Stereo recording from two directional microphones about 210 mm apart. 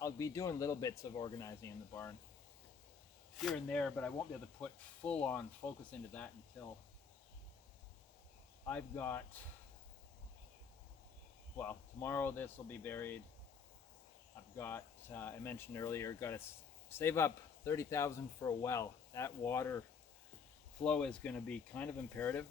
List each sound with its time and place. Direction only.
0.0 s speech: 15° left (ahead or behind)
3.3 s speech: centre (ahead or behind)
8.6 s speech: 10° left (ahead or behind)
11.5 s speech: 10° left (ahead or behind)
14.5 s speech: 10° left (ahead or behind)
20.8 s speech: 5° left (ahead or behind)